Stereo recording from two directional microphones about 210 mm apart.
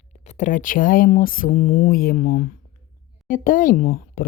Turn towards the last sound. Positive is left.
turn(degrees=40)  # may be behind; listen again after turning